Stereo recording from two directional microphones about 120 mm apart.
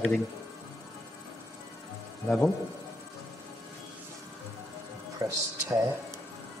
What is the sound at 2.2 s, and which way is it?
Speech, 10° left (ahead or behind).